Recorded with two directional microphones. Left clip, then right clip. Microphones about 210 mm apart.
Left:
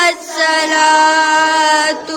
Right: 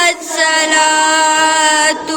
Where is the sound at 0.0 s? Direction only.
25° left (ahead or behind).